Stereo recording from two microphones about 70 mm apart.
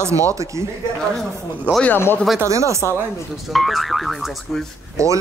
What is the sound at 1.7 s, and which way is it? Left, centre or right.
Speech, right.